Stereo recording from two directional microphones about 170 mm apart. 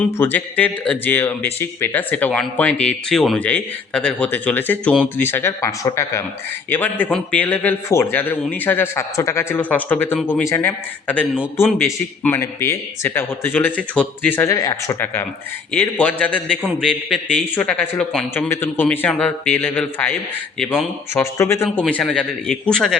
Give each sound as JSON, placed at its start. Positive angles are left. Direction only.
{"t": 0.2, "sound": "speech", "side_deg": 10}
{"t": 12.2, "sound": "a man's voice", "side_deg": 15}
{"t": 18.3, "sound": "speech", "side_deg": 15}
{"t": 20.6, "sound": "a man's voice", "side_deg": -5}
{"t": 21.2, "sound": "speech", "side_deg": 15}